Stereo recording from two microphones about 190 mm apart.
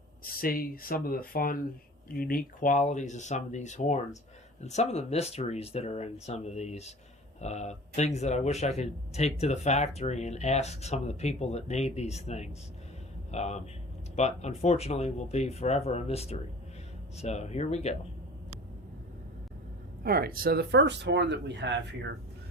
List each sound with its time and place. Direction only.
0.3 s speech: 50° left (ahead or behind); by 17.9 s 35° left (ahead or behind)
20.1 s speech: 50° right (ahead or behind); by 21.8 s 65° right (ahead or behind)